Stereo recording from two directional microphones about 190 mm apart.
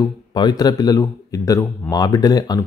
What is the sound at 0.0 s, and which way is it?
A man's voice, 20° left (ahead or behind).